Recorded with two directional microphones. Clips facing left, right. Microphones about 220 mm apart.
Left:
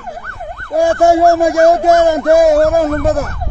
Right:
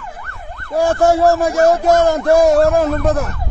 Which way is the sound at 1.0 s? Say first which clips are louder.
Left 3 dB; 15° left (ahead or behind).